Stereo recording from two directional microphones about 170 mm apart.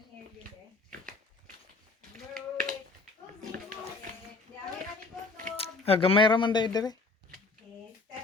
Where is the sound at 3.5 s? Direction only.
55° right (ahead or behind).